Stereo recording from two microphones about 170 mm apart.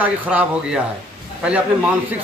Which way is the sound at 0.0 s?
10° right (ahead or behind).